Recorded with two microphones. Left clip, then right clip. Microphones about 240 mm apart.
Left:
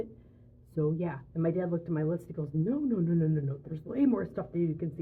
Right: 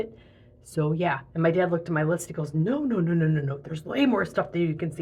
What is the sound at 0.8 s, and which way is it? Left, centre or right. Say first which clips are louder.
Speech: right 7 dB; centre.